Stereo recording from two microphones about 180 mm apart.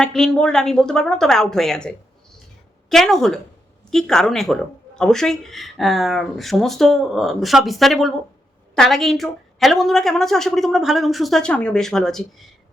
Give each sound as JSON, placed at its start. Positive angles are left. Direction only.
{"t": 0.0, "sound": "a woman's voice", "side_deg": 5}